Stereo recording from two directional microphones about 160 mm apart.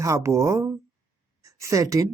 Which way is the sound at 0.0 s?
20° right (ahead or behind).